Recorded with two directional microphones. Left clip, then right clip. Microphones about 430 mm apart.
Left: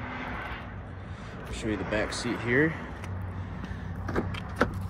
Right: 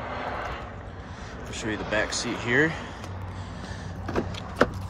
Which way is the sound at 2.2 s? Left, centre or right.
Right.